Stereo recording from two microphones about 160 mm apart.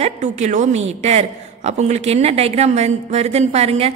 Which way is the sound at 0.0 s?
45° right (ahead or behind).